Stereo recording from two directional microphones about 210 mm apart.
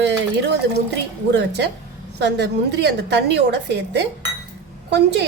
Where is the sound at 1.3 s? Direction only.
55° right (ahead or behind).